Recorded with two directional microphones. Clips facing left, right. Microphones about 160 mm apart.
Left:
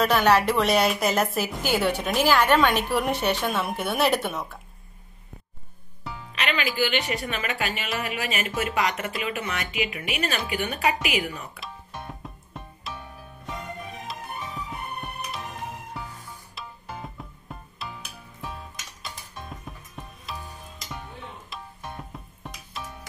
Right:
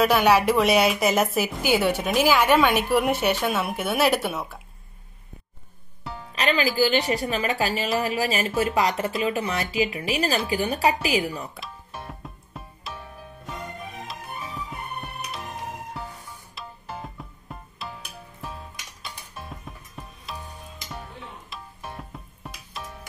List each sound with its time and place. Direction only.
0.0 s a woman's voice: 10° right (ahead or behind)
6.3 s speech: 35° right (ahead or behind)
11.6 s music: centre (ahead or behind)
14.0 s music: centre (ahead or behind)
16.5 s music: centre (ahead or behind)
19.0 s music: centre (ahead or behind)
21.5 s music: centre (ahead or behind)